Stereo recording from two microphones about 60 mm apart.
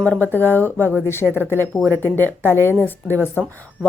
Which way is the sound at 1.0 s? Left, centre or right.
Left.